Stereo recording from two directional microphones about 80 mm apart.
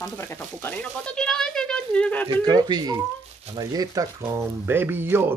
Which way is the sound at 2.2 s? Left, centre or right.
Right.